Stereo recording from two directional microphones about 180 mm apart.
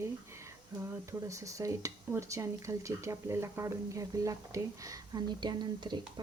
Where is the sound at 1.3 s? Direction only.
15° right (ahead or behind).